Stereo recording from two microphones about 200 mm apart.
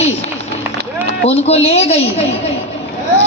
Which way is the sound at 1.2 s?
30° left (ahead or behind).